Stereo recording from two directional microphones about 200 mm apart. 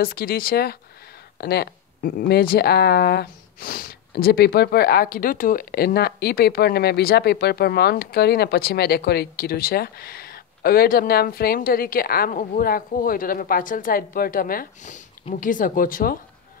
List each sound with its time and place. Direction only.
0.0 s speech: 50° left (ahead or behind)